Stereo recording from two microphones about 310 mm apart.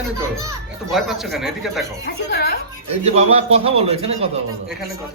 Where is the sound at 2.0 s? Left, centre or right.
Left.